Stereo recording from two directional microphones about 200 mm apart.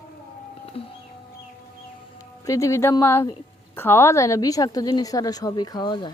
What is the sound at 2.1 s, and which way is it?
A woman's voice, 15° left (ahead or behind).